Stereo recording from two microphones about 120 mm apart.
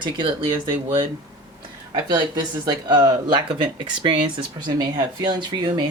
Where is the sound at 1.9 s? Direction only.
35° right (ahead or behind).